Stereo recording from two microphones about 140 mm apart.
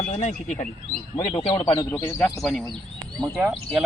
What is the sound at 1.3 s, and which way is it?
Speech, 35° left (ahead or behind).